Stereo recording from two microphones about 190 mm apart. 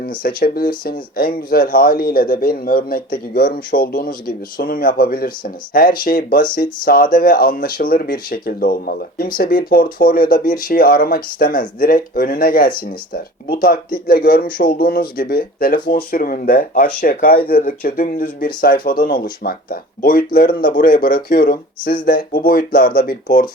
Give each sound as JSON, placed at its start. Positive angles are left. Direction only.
{"t": 0.2, "sound": "a man's voice", "side_deg": 50}